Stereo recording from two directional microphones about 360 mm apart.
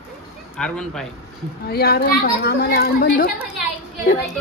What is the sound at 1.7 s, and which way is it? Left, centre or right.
A woman's voice, left.